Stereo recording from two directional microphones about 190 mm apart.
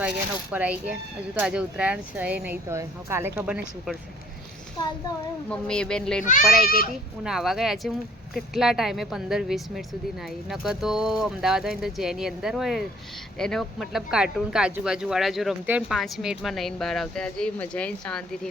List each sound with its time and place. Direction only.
0.5 s speech: 10° right (ahead or behind)
5.5 s speech: 5° left (ahead or behind)
6.7 s speech: 50° left (ahead or behind)
7.3 s speech: centre (ahead or behind)